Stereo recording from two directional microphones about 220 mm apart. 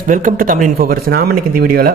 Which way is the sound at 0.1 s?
35° right (ahead or behind).